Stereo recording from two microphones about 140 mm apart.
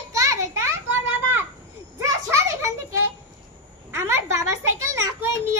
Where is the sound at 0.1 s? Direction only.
25° right (ahead or behind).